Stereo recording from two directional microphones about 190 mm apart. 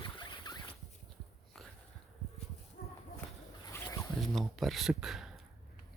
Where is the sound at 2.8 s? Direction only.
50° left (ahead or behind).